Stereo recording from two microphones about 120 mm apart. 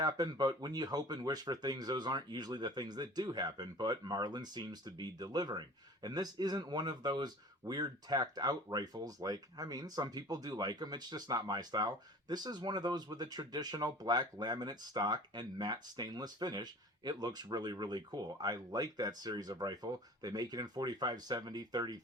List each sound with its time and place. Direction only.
0.0 s speech: 35° right (ahead or behind)